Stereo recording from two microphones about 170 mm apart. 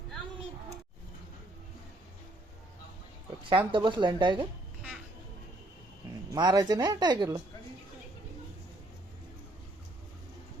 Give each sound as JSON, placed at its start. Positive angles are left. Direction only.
{"t": 3.7, "sound": "speech", "side_deg": -30}
{"t": 6.3, "sound": "speech", "side_deg": -25}